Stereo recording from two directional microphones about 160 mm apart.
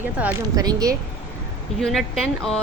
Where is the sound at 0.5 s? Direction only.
25° right (ahead or behind).